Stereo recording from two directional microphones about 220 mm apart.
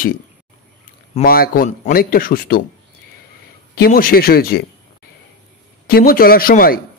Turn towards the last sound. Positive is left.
turn(degrees=40)  # may be behind; listen again after turning